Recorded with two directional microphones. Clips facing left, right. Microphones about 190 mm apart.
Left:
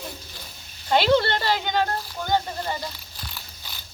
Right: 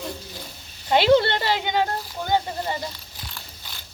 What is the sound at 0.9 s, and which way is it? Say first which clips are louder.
Speech: right 2 dB; 15° right (ahead or behind).